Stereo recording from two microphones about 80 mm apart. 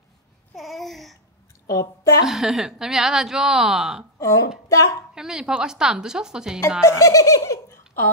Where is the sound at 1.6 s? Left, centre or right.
Left.